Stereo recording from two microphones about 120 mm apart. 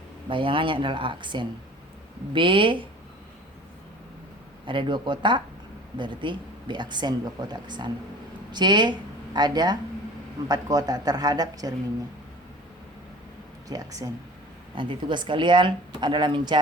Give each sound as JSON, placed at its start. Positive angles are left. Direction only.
{"t": 0.3, "sound": "speech", "side_deg": -45}
{"t": 4.6, "sound": "speech", "side_deg": -45}
{"t": 13.7, "sound": "speech", "side_deg": -30}
{"t": 14.8, "sound": "speech", "side_deg": -40}